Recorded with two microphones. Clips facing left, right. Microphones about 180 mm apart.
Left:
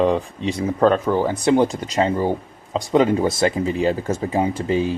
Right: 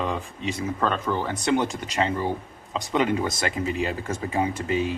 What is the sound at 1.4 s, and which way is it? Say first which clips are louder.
Speech: left 5 dB; 30° left (ahead or behind).